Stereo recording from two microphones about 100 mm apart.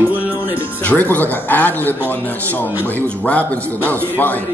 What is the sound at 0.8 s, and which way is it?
Speech, 15° left (ahead or behind).